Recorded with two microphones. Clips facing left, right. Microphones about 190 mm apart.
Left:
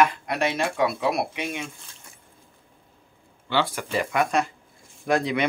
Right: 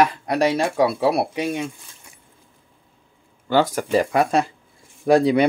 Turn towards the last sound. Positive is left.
turn(degrees=-35)  # may be behind; listen again after turning